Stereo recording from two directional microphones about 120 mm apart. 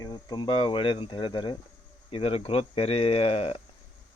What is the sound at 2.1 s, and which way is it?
Speech, 50° left (ahead or behind).